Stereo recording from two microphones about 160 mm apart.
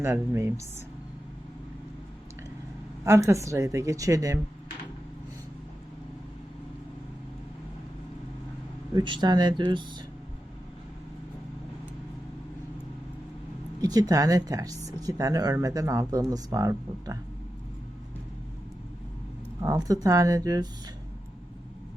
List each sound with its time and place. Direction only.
0.0 s speech: 15° right (ahead or behind)
3.0 s speech: 20° right (ahead or behind)
9.0 s speech: 30° right (ahead or behind)
13.8 s speech: 25° right (ahead or behind)
19.6 s speech: 25° right (ahead or behind)